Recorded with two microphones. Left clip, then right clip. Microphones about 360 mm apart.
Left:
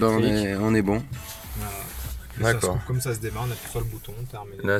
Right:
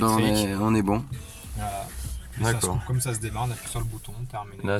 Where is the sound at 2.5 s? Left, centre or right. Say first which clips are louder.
Left 4 dB; centre.